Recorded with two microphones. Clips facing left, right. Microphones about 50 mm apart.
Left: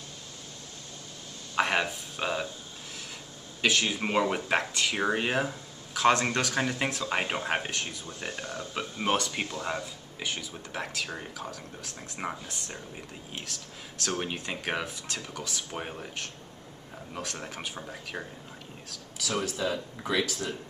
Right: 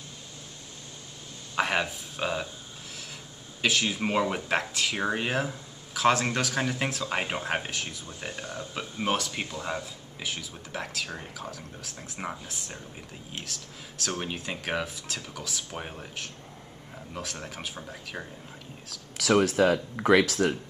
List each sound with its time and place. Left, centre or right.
1.5 s a sound: centre
3.6 s speech: centre
19.4 s speech: right